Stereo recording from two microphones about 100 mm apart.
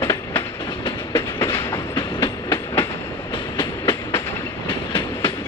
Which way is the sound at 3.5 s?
25° left (ahead or behind).